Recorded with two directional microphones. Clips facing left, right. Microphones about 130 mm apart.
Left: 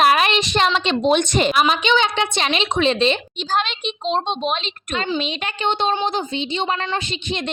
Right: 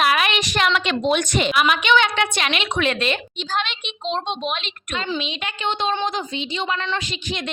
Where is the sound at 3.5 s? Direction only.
40° left (ahead or behind).